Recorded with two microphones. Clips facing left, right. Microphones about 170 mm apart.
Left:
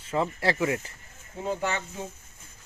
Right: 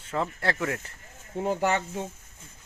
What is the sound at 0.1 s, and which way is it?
Speech, 5° left (ahead or behind).